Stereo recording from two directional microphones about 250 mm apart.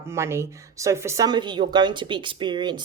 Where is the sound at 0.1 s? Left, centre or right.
Centre.